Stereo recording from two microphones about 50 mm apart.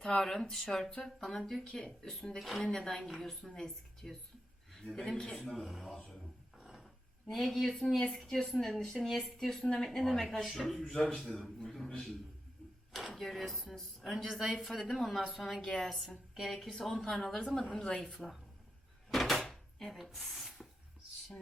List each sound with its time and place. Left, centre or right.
0.0 s speech: centre
2.6 s speech: centre
2.9 s a man's voice: centre
5.4 s speech: centre
6.6 s a sound: centre
7.3 s speech: centre
9.0 s speech: centre
9.4 s speech: centre
11.6 s a sound: centre
12.9 s speech: centre
19.1 s drawer open or close: centre